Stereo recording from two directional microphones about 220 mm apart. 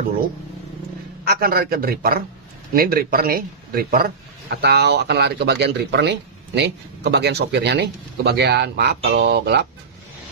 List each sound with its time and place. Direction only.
1.2 s a man's voice: 45° right (ahead or behind)